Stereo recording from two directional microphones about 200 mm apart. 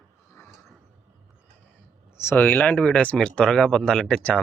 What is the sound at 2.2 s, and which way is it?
Speech, 10° left (ahead or behind).